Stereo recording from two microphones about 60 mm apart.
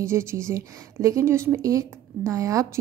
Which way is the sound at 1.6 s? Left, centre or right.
Right.